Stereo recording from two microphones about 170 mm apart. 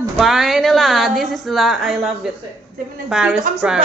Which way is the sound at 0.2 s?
Centre (ahead or behind).